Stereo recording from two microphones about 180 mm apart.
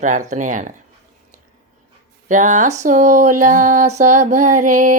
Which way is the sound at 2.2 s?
45° right (ahead or behind).